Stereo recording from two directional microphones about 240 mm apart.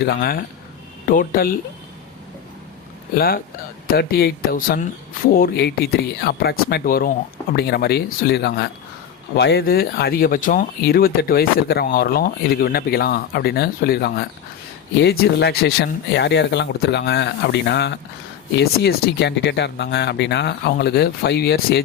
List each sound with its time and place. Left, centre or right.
0.0 s speech: left
3.2 s speech: left